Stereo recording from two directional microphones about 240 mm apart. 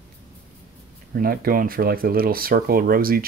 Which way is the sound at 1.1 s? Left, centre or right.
Right.